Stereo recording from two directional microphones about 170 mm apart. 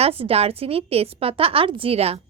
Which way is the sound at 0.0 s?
35° right (ahead or behind).